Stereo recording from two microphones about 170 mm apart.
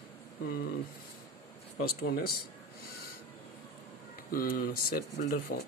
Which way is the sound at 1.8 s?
65° left (ahead or behind).